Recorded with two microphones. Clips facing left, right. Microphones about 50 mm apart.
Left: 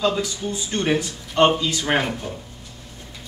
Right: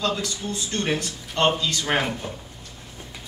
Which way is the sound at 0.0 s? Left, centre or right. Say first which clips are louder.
Left 4 dB; centre.